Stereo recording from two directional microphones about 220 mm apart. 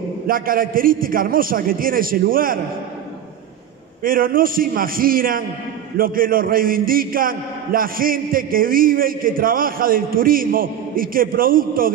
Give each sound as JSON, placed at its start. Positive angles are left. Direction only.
{"t": 0.3, "sound": "a man's voice", "side_deg": -40}
{"t": 4.0, "sound": "a man's voice", "side_deg": -40}